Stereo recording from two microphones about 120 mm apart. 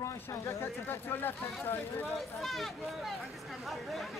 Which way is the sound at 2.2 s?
Centre (ahead or behind).